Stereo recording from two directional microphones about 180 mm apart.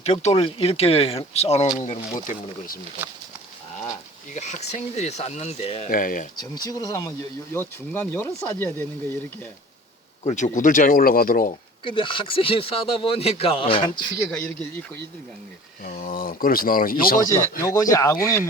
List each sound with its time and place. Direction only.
0.0 s speech: 35° left (ahead or behind)
4.4 s speech: 40° left (ahead or behind)
5.9 s speech: 50° left (ahead or behind)
6.3 s speech: 20° left (ahead or behind)
10.2 s speech: 40° left (ahead or behind)
11.9 s speech: 30° left (ahead or behind)
14.3 s speech: 5° left (ahead or behind)
15.8 s speech: 50° left (ahead or behind)
17.6 s speech: 20° left (ahead or behind)